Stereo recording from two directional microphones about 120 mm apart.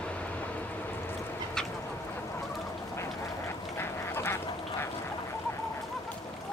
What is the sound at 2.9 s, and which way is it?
Duck, 20° left (ahead or behind).